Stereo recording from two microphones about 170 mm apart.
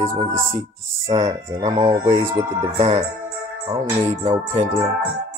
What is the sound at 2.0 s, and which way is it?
Speech, 35° right (ahead or behind).